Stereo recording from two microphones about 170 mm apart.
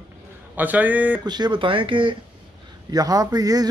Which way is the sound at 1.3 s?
25° right (ahead or behind).